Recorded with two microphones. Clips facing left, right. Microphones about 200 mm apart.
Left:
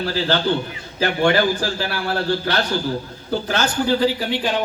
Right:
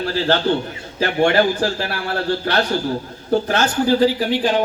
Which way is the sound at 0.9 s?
50° right (ahead or behind).